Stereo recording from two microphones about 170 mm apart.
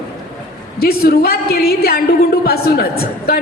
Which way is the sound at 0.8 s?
65° left (ahead or behind).